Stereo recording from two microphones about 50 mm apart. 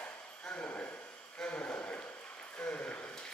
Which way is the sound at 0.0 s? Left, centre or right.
Left.